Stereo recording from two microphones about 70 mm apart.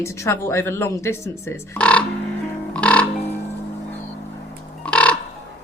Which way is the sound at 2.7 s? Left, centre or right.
Centre.